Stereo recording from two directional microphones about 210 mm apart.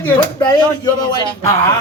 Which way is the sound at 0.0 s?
20° left (ahead or behind).